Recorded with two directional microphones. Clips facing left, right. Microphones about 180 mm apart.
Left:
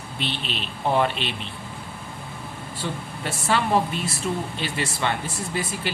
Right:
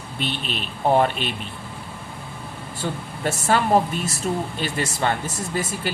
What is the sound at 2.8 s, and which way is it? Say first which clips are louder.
Speech: right 4 dB; 45° right (ahead or behind).